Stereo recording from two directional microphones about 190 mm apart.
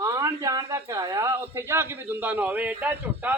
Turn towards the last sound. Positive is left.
turn(degrees=-10)  # may be behind; listen again after turning